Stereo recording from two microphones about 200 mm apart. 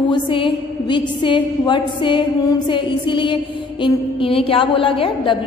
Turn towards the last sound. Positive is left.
turn(degrees=25)  # may be behind; listen again after turning